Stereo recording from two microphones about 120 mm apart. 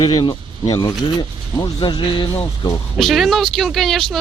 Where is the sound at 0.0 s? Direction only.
40° left (ahead or behind).